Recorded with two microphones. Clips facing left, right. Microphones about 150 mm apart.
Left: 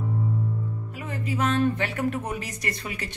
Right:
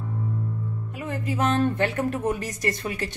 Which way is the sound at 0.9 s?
45° right (ahead or behind).